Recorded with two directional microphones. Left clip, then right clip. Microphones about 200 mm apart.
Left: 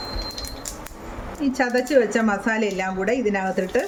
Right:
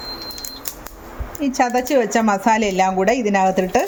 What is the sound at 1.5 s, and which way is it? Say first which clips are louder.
A woman's voice: right 2 dB; 30° right (ahead or behind).